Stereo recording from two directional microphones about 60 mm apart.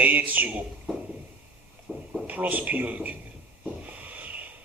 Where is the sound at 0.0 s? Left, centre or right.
Right.